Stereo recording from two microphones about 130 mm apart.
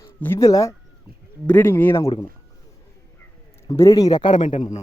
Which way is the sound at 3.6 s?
25° left (ahead or behind).